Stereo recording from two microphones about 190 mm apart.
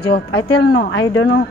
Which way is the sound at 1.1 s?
90° left.